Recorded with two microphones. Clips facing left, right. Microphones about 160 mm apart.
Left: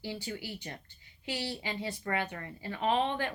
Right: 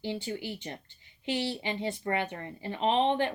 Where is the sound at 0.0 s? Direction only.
25° right (ahead or behind).